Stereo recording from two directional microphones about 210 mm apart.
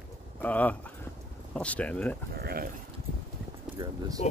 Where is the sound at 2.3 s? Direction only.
45° right (ahead or behind).